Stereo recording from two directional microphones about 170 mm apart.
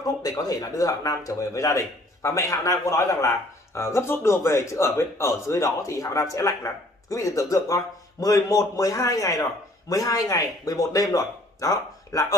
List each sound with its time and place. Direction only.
0.0 s speech: 20° left (ahead or behind)